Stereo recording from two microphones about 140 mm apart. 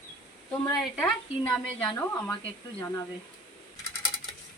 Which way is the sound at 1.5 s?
10° left (ahead or behind).